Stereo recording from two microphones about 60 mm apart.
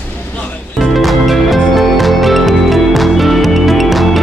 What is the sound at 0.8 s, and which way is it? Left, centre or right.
Music, centre.